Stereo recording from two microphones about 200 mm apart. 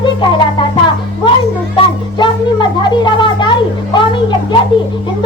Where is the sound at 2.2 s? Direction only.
25° left (ahead or behind).